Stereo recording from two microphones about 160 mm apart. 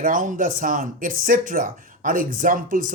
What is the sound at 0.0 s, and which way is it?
Speech, 55° right (ahead or behind).